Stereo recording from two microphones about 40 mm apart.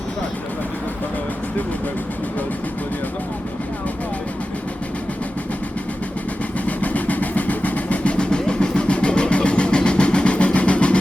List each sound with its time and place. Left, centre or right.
6.7 s train: left